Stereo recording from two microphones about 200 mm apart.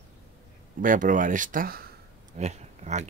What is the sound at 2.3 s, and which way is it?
Speech, 35° right (ahead or behind).